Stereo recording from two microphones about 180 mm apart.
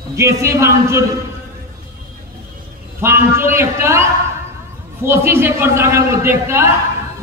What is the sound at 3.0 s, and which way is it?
A man's voice, 15° right (ahead or behind).